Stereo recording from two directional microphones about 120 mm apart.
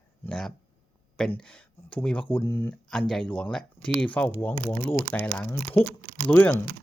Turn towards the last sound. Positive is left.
turn(degrees=15)  # may be behind; listen again after turning